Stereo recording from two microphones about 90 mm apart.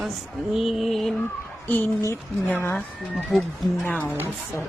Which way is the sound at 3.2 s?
Centre (ahead or behind).